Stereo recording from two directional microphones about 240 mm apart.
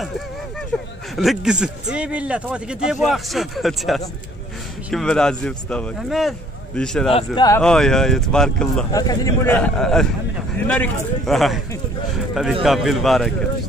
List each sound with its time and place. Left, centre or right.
0.7 s a sound: centre
1.1 s a man's voice: centre
7.1 s a man's voice: left
7.6 s a man's voice: centre
8.9 s a man's voice: centre
12.6 s a man's voice: centre